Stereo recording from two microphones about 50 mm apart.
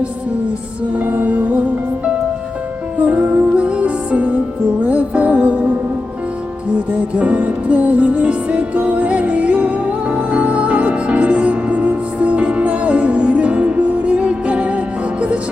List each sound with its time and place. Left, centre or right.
0.9 s music: right
3.0 s music: right
7.2 s music: right